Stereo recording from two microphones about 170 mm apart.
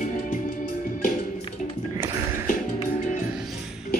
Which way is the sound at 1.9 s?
15° right (ahead or behind).